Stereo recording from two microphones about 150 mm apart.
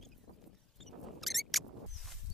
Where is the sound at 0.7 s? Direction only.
Centre (ahead or behind).